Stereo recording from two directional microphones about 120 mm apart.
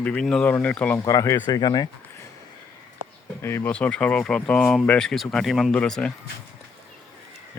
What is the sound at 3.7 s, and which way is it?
Speech, 10° left (ahead or behind).